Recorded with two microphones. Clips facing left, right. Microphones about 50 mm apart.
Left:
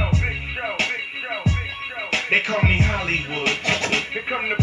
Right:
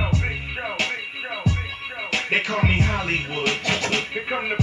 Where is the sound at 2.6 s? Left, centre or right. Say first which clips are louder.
Left 1 dB; left.